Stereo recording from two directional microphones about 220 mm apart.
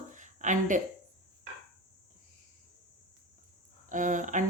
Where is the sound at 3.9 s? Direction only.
35° right (ahead or behind).